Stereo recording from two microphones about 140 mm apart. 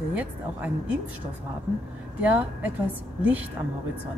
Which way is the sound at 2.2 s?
10° right (ahead or behind).